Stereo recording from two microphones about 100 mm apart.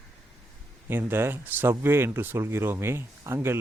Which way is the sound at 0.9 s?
20° right (ahead or behind).